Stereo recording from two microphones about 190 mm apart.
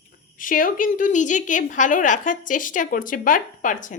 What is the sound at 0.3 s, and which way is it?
A woman's voice, 45° left (ahead or behind).